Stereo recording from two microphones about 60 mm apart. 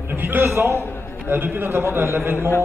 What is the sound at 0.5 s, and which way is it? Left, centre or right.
Speech, right.